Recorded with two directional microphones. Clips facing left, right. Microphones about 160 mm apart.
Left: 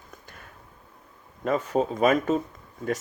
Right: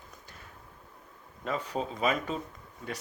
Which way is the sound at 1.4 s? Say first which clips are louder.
Left 8 dB; 50° left (ahead or behind).